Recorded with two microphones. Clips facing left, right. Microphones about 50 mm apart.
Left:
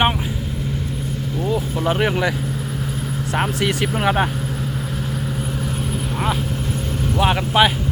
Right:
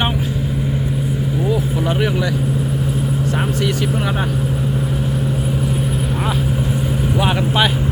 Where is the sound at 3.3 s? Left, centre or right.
Centre.